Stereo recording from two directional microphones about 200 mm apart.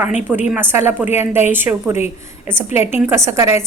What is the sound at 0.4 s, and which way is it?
A woman's voice, 10° right (ahead or behind).